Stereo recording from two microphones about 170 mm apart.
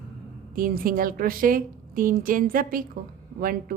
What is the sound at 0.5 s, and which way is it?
A woman's voice, 55° right (ahead or behind).